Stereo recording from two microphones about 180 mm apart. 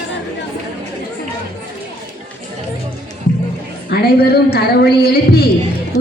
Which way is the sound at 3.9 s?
60° left (ahead or behind).